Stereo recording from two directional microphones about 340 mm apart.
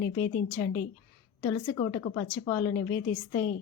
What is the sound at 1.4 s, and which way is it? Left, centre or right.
A woman's voice, centre.